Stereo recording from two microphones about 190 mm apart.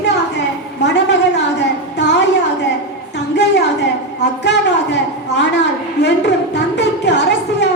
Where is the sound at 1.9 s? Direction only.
65° left (ahead or behind).